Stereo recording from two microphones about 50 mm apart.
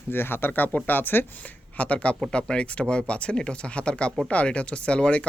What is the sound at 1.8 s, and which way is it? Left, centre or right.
A man's voice, left.